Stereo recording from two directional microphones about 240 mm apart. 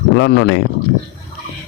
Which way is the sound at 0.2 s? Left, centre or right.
Left.